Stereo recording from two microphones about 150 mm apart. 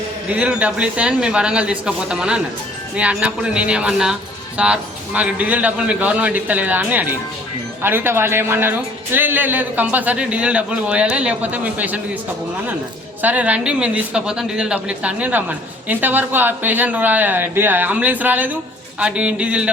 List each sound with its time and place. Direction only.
0.3 s speech: 10° right (ahead or behind)
13.2 s speech: 10° right (ahead or behind)